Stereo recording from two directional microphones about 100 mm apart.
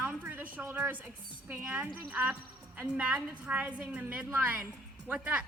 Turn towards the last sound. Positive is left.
turn(degrees=-15)  # may be behind; listen again after turning